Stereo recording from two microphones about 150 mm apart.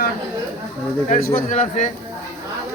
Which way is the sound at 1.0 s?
60° left (ahead or behind).